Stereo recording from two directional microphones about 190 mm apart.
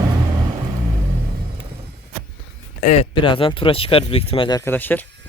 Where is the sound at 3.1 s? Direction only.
25° left (ahead or behind).